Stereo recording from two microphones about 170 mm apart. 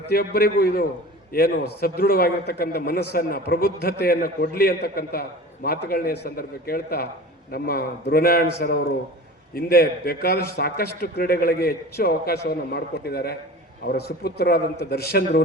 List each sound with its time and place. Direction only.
0.1 s a man's voice: 60° left (ahead or behind)